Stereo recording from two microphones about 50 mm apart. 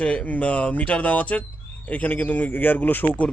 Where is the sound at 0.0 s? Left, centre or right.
Left.